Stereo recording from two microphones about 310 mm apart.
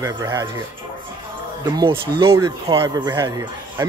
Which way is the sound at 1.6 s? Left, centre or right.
Centre.